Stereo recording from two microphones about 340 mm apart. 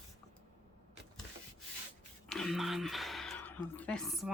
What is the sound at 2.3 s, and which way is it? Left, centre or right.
Speech, centre.